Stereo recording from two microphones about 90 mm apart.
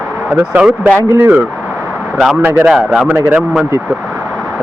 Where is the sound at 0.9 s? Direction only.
30° right (ahead or behind).